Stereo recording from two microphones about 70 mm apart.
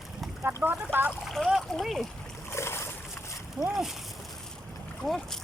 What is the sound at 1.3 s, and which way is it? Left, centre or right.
Speech, centre.